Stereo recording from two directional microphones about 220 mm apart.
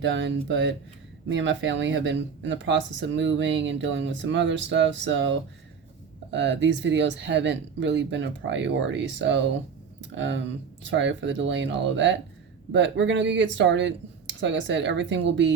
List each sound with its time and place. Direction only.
0.0 s speech: 55° right (ahead or behind)